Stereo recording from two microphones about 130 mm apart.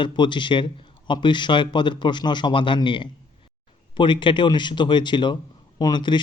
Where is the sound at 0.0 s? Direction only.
35° left (ahead or behind).